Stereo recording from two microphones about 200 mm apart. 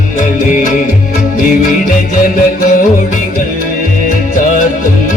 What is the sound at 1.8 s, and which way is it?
Music, 45° left (ahead or behind).